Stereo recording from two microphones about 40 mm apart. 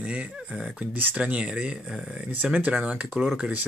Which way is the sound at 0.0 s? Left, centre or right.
Right.